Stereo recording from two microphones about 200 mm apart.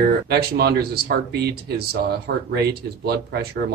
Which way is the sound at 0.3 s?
50° right (ahead or behind).